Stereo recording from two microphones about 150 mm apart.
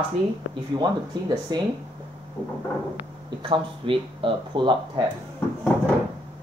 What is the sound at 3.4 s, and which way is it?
Speech, 35° right (ahead or behind).